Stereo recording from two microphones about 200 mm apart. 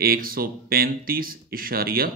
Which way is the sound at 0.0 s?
45° right (ahead or behind).